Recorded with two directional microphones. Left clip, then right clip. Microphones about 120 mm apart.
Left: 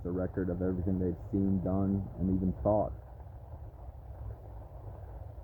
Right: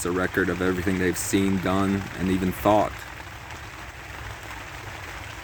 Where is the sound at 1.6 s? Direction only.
55° right (ahead or behind).